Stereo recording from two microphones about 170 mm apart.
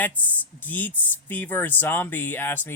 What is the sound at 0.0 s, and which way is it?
Speech, 10° left (ahead or behind).